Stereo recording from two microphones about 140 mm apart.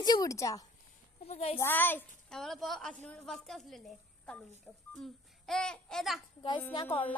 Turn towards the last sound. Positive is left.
turn(degrees=35)  # may be behind; listen again after turning